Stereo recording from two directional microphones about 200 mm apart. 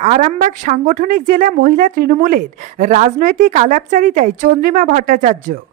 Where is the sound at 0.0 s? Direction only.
35° right (ahead or behind).